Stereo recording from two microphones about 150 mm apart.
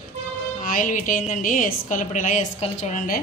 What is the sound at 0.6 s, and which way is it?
A woman's voice, 65° left (ahead or behind).